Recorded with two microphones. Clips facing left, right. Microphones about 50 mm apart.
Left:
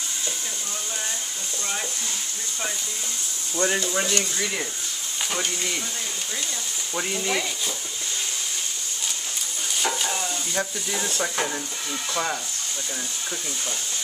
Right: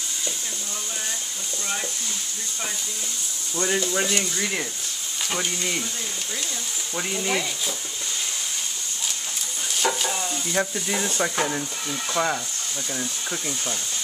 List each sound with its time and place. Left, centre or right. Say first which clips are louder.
3.5 s speech: even; centre
7.0 s speech: even; centre
9.8 s stir: right 2 dB; centre
10.5 s speech: right 5 dB; centre